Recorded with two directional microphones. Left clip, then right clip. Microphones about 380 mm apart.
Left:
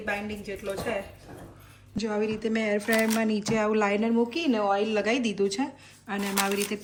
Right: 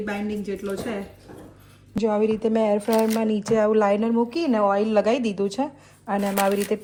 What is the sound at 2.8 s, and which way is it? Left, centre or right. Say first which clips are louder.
Speech: right 4 dB; right.